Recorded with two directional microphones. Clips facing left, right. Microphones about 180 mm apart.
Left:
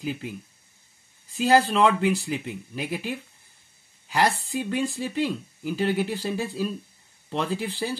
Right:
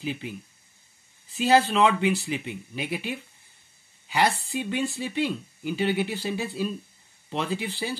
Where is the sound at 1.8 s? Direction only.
5° right (ahead or behind).